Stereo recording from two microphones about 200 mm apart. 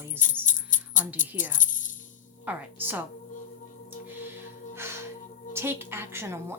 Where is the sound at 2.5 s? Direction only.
10° right (ahead or behind).